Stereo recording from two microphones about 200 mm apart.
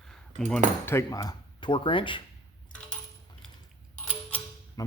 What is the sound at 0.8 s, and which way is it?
Speech, 15° left (ahead or behind).